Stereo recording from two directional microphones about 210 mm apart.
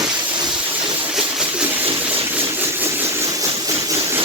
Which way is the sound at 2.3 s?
10° right (ahead or behind).